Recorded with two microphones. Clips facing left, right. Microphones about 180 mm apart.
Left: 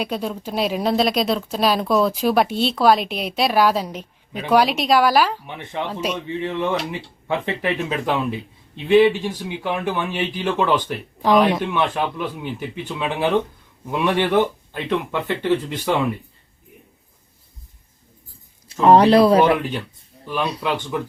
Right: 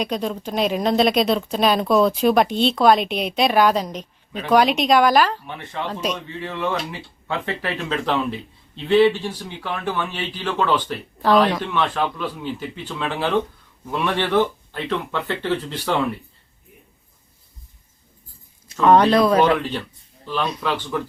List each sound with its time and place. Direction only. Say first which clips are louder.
0.0 s speech: right 1 dB; 5° left (ahead or behind)
18.7 s speech: left 2 dB; 30° left (ahead or behind)
20.2 s speech: left 1 dB; 10° left (ahead or behind)